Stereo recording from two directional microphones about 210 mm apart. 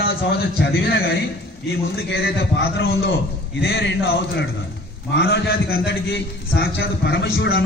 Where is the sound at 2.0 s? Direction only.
55° left (ahead or behind).